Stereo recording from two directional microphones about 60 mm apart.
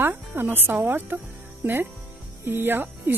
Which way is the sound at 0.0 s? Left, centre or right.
Right.